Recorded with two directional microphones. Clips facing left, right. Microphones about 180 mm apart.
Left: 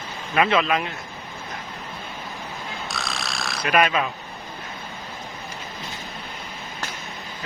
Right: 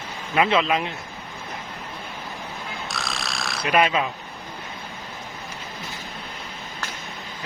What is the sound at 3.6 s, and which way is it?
Speech, 20° right (ahead or behind).